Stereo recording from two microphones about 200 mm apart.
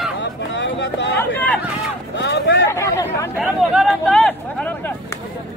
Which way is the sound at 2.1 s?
60° left (ahead or behind).